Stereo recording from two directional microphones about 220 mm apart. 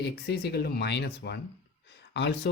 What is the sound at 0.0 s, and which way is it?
Speech, 45° left (ahead or behind).